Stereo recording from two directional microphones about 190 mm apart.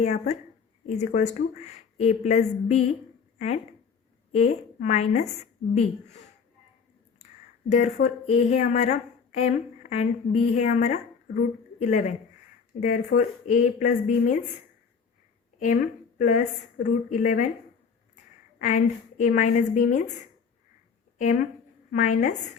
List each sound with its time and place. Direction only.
0.0 s speech: 35° left (ahead or behind)
7.7 s a woman's voice: 35° left (ahead or behind)
15.5 s a woman's voice: 40° left (ahead or behind)
18.6 s speech: 40° left (ahead or behind)
21.2 s speech: 40° left (ahead or behind)